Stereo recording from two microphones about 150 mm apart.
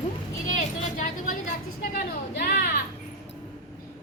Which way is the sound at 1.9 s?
80° left.